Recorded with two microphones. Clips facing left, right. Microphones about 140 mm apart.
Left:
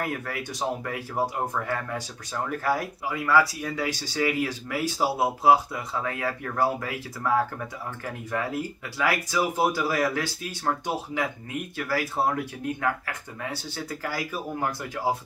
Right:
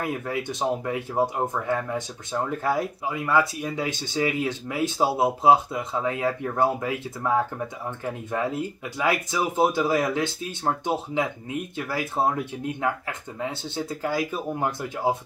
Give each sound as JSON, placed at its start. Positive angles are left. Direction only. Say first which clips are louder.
{"t": 0.0, "sound": "speech", "louder": "right 3 dB", "side_deg": -20}